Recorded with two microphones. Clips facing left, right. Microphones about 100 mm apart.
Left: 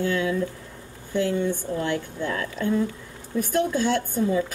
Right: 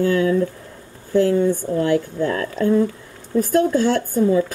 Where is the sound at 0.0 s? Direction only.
45° right (ahead or behind).